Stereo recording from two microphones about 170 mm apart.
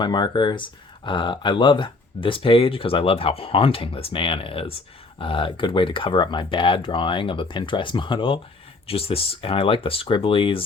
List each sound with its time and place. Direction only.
0.0 s speech: 25° left (ahead or behind)